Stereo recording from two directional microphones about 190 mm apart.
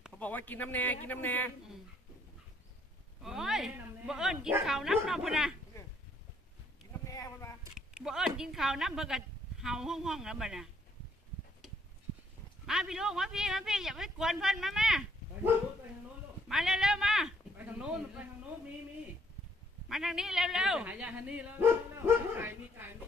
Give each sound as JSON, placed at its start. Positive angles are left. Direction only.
{"t": 0.2, "sound": "a man's voice", "side_deg": 10}
{"t": 3.2, "sound": "a man's voice", "side_deg": 0}
{"t": 7.1, "sound": "bleat", "side_deg": 20}
{"t": 7.7, "sound": "speech", "side_deg": -5}
{"t": 12.6, "sound": "a man's voice", "side_deg": 0}
{"t": 19.9, "sound": "speech", "side_deg": 0}